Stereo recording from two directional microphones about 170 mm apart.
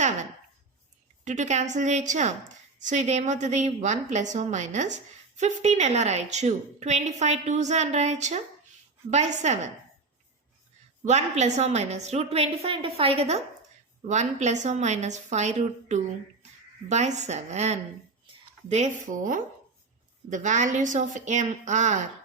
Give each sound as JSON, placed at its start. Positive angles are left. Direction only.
{"t": 1.2, "sound": "a woman's voice", "side_deg": -45}
{"t": 11.0, "sound": "a woman's voice", "side_deg": -40}